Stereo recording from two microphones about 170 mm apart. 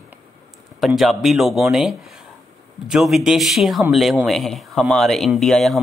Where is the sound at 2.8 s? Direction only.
Centre (ahead or behind).